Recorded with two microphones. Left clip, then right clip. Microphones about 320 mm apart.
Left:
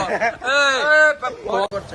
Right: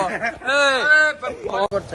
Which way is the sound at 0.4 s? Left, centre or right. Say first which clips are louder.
Right 1 dB; centre.